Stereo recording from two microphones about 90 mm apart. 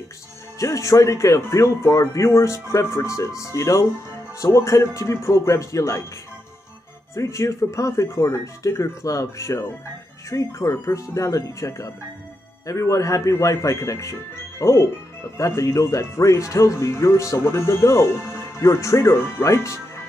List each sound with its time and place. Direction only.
0.6 s speech: 35° left (ahead or behind)
7.2 s speech: 35° left (ahead or behind)